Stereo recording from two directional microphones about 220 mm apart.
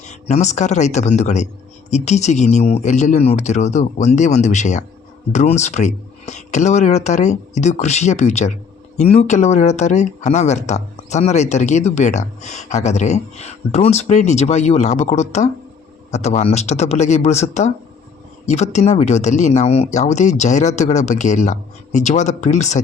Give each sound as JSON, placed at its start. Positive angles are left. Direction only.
{"t": 0.0, "sound": "speech", "side_deg": 30}